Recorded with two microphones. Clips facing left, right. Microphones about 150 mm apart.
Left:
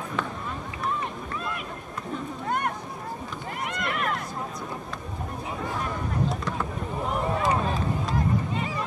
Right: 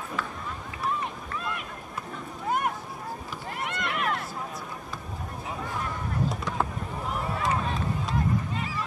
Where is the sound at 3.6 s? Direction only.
Centre (ahead or behind).